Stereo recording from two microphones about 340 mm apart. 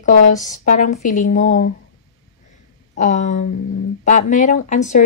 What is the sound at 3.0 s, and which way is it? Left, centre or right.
A woman's voice, left.